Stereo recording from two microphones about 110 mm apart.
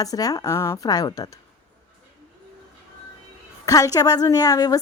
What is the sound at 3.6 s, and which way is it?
Speech, 30° left (ahead or behind).